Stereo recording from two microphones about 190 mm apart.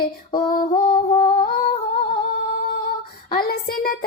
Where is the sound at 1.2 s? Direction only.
25° left (ahead or behind).